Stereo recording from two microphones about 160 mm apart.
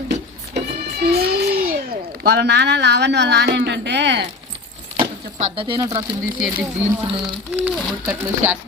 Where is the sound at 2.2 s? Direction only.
90° right.